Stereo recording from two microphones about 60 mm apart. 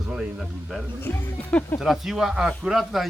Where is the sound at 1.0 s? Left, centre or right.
Left.